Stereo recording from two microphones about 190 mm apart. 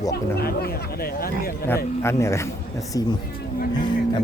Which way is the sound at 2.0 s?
15° left (ahead or behind).